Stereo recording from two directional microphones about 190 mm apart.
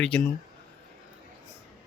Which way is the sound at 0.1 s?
5° left (ahead or behind).